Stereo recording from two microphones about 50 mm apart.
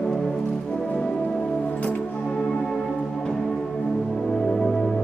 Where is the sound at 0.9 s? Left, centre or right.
Left.